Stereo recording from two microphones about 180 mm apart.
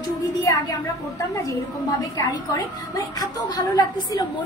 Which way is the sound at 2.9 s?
20° left (ahead or behind).